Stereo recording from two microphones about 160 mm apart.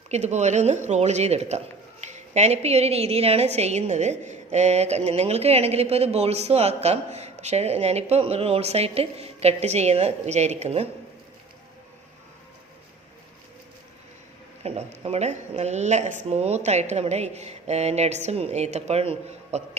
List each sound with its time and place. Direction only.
0.1 s a man's voice: 45° right (ahead or behind)
14.6 s a woman's voice: 40° right (ahead or behind)